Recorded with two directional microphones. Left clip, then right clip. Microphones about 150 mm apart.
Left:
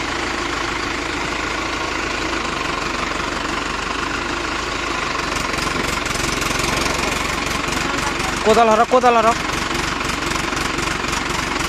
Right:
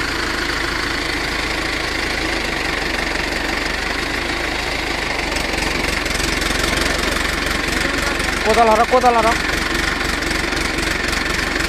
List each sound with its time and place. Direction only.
8.6 s speech: 55° left (ahead or behind)